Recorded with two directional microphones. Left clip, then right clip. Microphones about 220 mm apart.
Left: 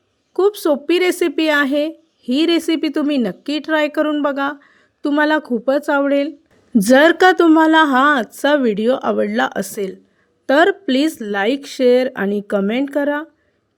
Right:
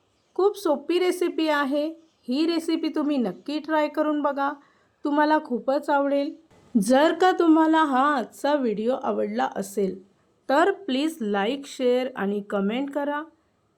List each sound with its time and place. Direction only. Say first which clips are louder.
0.3 s speech: left 7 dB; 40° left (ahead or behind)